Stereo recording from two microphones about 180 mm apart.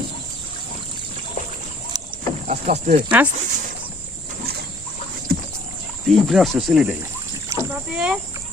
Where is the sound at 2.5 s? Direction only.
40° right (ahead or behind).